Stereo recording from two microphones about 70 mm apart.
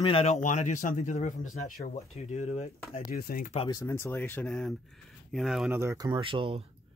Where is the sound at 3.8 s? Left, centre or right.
Left.